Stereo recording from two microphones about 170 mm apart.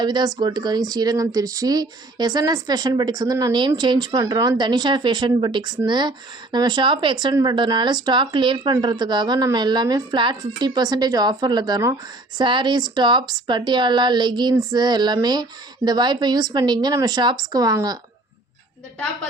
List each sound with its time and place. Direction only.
0.0 s speech: 25° right (ahead or behind)